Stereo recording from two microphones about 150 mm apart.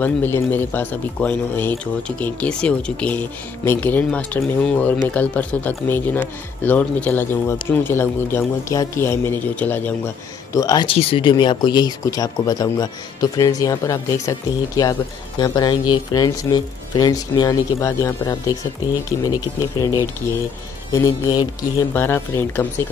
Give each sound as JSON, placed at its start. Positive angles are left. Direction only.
{"t": 0.0, "sound": "speech", "side_deg": 15}
{"t": 10.5, "sound": "speech", "side_deg": 25}
{"t": 10.9, "sound": "speech", "side_deg": 40}
{"t": 20.9, "sound": "speech", "side_deg": 25}
{"t": 21.9, "sound": "speech", "side_deg": 15}